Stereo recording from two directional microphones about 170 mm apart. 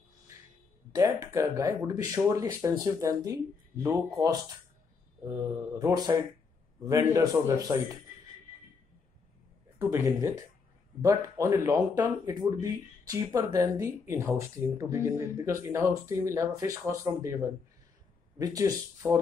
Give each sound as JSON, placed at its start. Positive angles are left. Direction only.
{"t": 0.9, "sound": "speech", "side_deg": -20}
{"t": 9.8, "sound": "speech", "side_deg": -15}